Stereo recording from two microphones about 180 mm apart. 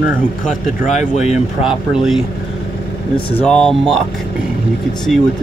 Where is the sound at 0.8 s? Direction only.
40° left (ahead or behind).